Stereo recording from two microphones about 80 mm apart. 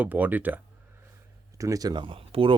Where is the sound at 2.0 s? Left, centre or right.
Right.